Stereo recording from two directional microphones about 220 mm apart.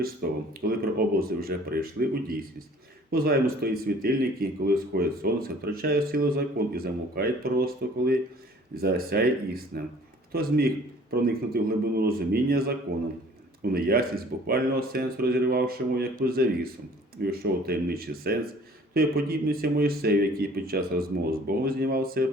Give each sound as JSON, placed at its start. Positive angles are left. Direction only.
{"t": 0.0, "sound": "speech", "side_deg": -45}